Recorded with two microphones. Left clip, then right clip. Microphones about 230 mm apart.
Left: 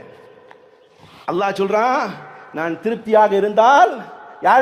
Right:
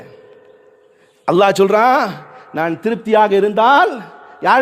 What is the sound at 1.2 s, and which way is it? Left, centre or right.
A man's voice, right.